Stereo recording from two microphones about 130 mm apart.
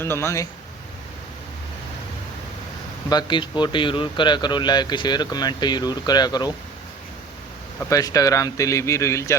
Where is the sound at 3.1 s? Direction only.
35° left (ahead or behind).